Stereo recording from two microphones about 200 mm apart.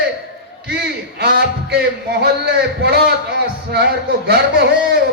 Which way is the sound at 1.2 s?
55° right (ahead or behind).